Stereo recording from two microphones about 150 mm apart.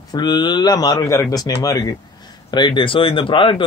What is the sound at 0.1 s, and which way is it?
Speech, 30° left (ahead or behind).